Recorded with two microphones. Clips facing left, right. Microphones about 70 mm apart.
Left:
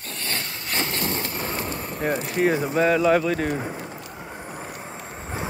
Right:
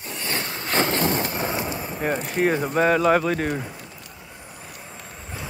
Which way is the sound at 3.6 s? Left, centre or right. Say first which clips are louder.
Left 5 dB; left.